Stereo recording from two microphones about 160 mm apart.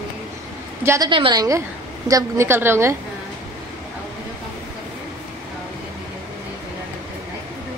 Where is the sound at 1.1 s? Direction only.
30° right (ahead or behind); by 2.9 s 15° right (ahead or behind).